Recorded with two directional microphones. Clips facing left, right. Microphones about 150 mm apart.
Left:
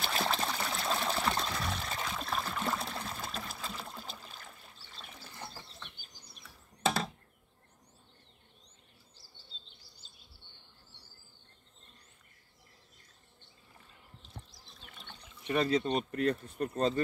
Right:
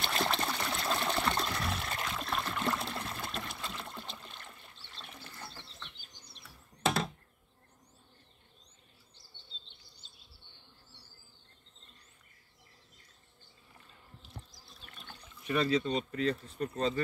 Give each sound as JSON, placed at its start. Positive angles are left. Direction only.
{"t": 0.0, "sound": "water", "side_deg": 0}
{"t": 6.8, "sound": "a sound", "side_deg": 0}
{"t": 14.9, "sound": "water", "side_deg": 0}
{"t": 15.4, "sound": "speech", "side_deg": 30}
{"t": 15.8, "sound": "speech", "side_deg": 55}